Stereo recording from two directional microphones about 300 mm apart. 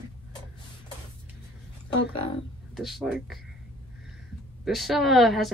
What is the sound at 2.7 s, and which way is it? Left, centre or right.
Speech, centre.